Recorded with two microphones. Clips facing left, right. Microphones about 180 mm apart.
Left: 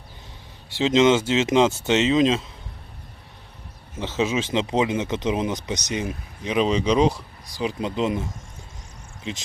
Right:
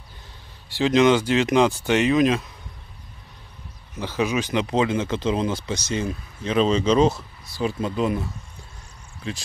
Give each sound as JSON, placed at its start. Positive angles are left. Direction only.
{"t": 0.7, "sound": "speech", "side_deg": 20}
{"t": 4.0, "sound": "speech", "side_deg": 25}